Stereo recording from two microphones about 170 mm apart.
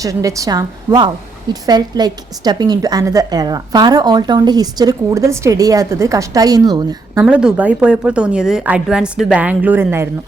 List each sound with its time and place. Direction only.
0.0 s a woman's voice: 20° right (ahead or behind)
7.3 s a woman's voice: 5° right (ahead or behind)